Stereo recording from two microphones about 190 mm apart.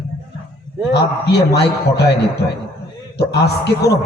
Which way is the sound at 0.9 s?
60° left (ahead or behind).